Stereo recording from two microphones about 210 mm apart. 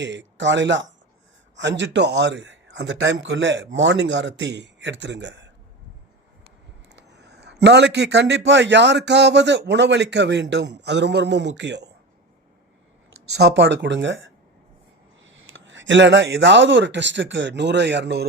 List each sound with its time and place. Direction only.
0.0 s speech: 60° right (ahead or behind)
6.8 s speech: 55° right (ahead or behind)
13.4 s speech: 55° right (ahead or behind)